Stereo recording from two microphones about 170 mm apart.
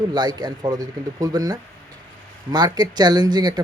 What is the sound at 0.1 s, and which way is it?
Speech, 25° right (ahead or behind).